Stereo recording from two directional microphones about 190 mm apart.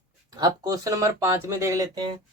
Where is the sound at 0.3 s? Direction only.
20° right (ahead or behind).